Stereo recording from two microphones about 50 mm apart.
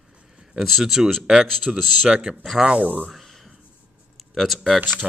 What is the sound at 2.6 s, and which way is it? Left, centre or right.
Speech, right.